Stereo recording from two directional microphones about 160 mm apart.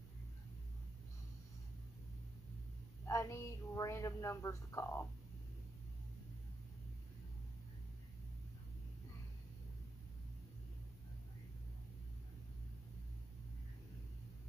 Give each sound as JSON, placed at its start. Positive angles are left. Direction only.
{"t": 3.1, "sound": "a woman's voice", "side_deg": 15}